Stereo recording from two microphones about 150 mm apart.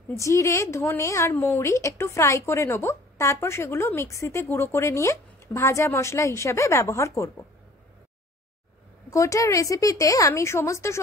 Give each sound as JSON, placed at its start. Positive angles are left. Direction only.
{"t": 0.2, "sound": "speech", "side_deg": 20}
{"t": 9.1, "sound": "speech", "side_deg": 20}